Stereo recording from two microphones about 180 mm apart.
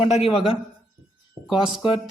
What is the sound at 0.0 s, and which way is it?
Speech, 35° left (ahead or behind).